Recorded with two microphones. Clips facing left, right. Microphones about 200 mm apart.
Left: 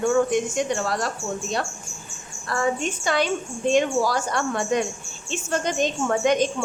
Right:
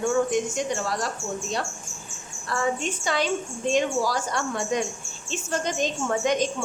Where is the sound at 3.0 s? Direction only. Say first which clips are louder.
Left 3 dB; 55° left (ahead or behind).